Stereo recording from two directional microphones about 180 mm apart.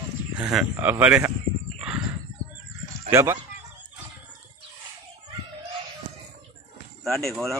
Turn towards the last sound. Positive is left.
turn(degrees=0)  # may be behind; listen again after turning